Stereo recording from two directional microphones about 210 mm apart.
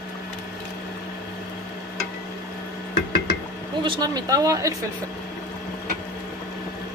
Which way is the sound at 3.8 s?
20° right (ahead or behind).